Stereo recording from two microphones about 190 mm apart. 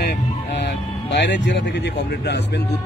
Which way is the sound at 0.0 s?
60° left (ahead or behind).